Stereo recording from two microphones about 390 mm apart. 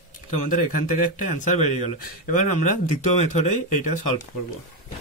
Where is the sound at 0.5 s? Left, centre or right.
Centre.